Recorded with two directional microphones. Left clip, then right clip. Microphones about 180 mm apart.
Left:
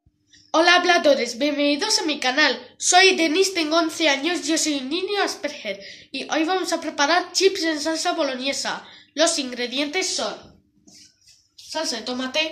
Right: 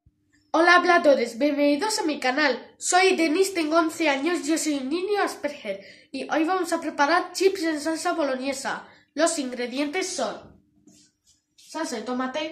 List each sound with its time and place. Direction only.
0.5 s a woman's voice: 5° right (ahead or behind)
11.7 s speech: 45° right (ahead or behind)